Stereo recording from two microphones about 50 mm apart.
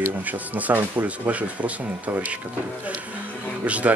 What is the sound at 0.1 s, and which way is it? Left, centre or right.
Speech, right.